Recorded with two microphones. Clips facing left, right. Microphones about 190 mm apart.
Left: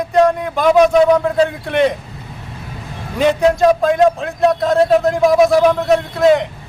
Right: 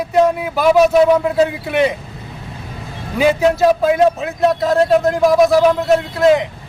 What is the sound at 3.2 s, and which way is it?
A man's voice, 5° right (ahead or behind).